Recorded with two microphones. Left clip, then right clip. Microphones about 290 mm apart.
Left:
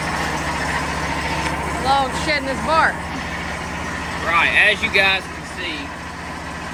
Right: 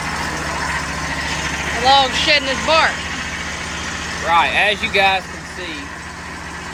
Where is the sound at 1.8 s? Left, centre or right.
Centre.